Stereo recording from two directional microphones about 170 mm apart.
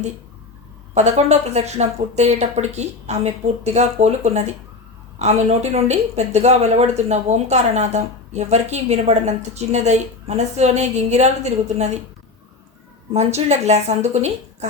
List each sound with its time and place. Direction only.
0.9 s speech: 40° right (ahead or behind)
13.1 s speech: 40° right (ahead or behind)